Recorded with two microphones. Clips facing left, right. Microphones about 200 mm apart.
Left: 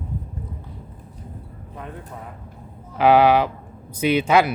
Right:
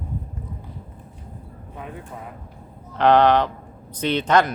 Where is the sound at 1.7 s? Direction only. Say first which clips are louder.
Even; 5° right (ahead or behind).